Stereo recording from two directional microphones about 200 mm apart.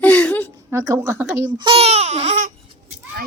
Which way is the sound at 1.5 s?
25° right (ahead or behind).